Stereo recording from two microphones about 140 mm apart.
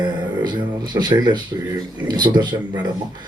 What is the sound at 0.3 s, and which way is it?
Speech, 30° right (ahead or behind).